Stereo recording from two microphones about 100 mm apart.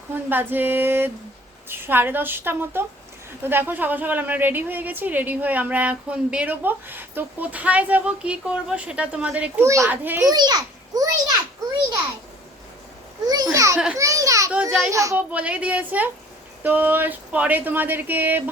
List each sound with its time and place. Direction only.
0.3 s a woman's voice: 20° right (ahead or behind)
9.6 s a child's voice: 30° right (ahead or behind)
9.9 s speech: 20° right (ahead or behind)
10.2 s a child's voice: 45° right (ahead or behind)
13.2 s a child's voice: 40° right (ahead or behind)
15.2 s a woman's voice: 15° right (ahead or behind)